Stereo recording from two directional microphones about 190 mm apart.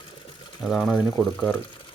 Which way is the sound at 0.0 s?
25° left (ahead or behind).